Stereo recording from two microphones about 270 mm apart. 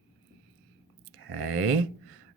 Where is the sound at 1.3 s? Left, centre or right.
Right.